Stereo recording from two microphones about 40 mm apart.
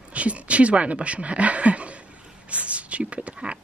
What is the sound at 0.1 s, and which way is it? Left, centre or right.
Speech, right.